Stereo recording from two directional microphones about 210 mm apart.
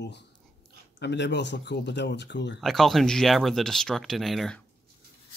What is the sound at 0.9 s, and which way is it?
Speech, 55° left (ahead or behind).